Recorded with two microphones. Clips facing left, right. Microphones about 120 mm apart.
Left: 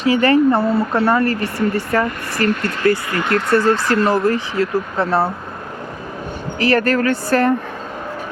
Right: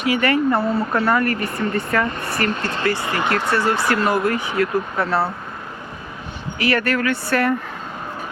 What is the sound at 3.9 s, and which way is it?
Speech, 30° left (ahead or behind).